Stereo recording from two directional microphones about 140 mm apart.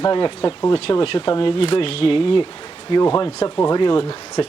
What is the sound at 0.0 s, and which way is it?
Speech, 35° left (ahead or behind).